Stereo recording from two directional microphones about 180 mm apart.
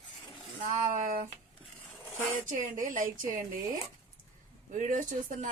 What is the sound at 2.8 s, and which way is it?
A woman's voice, 45° right (ahead or behind).